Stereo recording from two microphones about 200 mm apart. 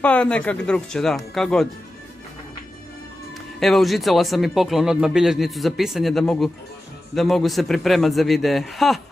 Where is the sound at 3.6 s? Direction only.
Centre (ahead or behind).